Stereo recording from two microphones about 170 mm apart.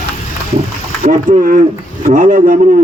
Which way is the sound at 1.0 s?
50° right (ahead or behind).